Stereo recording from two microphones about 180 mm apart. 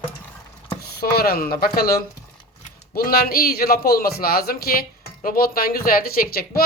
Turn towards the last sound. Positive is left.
turn(degrees=55)  # may be behind; listen again after turning